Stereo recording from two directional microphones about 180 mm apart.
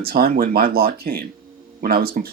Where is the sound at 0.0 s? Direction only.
55° right (ahead or behind).